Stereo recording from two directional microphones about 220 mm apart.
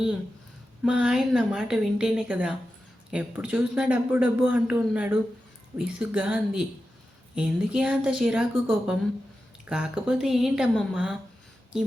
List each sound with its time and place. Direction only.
0.9 s a man's voice: centre (ahead or behind)